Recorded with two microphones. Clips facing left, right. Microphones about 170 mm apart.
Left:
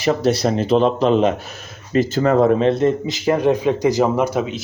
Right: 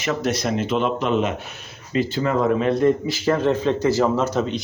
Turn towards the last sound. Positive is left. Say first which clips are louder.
# left 2 dB
turn(degrees=10)  # may be behind; listen again after turning